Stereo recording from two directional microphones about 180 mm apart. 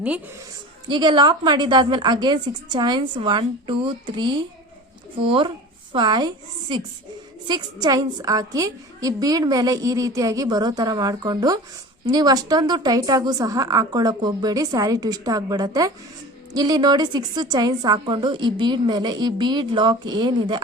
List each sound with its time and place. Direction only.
0.9 s a woman's voice: 25° right (ahead or behind)
5.9 s a woman's voice: 25° right (ahead or behind)